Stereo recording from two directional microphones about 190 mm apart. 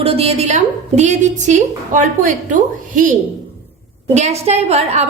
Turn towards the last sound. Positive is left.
turn(degrees=-35)  # may be behind; listen again after turning